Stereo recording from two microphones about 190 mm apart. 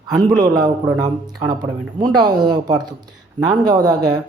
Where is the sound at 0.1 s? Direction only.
20° right (ahead or behind).